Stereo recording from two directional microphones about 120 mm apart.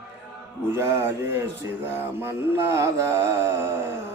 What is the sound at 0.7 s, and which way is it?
Music, 20° right (ahead or behind).